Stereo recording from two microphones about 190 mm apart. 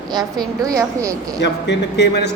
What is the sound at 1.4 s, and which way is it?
Speech, 65° left (ahead or behind).